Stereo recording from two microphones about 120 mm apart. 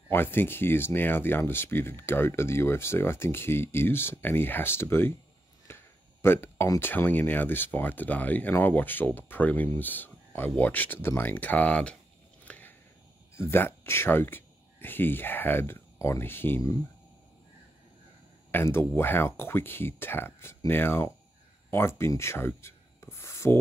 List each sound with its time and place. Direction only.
0.1 s speech: 20° left (ahead or behind)
5.7 s a sound: 20° left (ahead or behind)
6.2 s speech: 20° left (ahead or behind)
12.4 s a sound: 15° left (ahead or behind)
13.4 s speech: 20° left (ahead or behind)
18.5 s speech: 20° left (ahead or behind)